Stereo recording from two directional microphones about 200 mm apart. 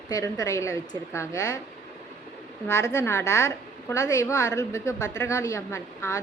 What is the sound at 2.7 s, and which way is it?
A woman's voice, 15° left (ahead or behind).